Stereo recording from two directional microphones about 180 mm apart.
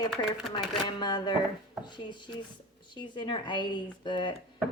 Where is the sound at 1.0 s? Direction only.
25° left (ahead or behind).